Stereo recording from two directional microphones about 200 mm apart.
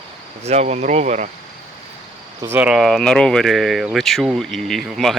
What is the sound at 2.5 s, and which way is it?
Speech, 5° right (ahead or behind).